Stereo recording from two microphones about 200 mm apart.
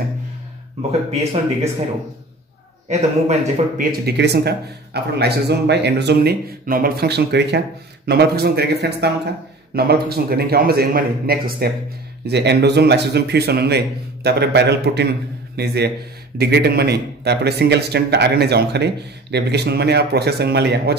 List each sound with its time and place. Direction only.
2.9 s a man's voice: 35° right (ahead or behind); by 20.9 s 55° right (ahead or behind)